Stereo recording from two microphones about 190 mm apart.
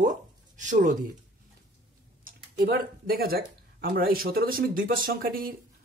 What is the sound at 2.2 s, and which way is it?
Speech, 50° right (ahead or behind).